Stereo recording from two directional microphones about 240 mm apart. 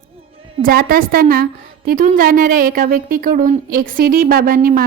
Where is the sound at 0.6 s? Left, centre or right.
Right.